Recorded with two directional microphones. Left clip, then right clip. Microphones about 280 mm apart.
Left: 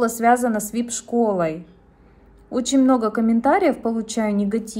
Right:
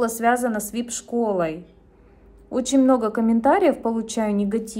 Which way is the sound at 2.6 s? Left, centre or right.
Centre.